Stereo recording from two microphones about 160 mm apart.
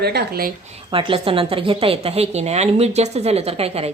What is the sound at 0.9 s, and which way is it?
A woman's voice, 35° right (ahead or behind).